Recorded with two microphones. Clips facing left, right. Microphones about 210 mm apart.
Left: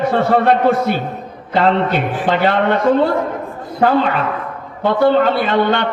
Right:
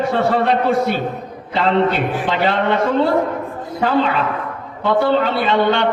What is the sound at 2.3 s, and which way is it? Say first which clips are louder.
Speech: left 4 dB; 50° left (ahead or behind).